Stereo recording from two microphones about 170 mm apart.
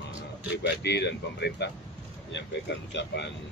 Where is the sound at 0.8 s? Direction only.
85° left.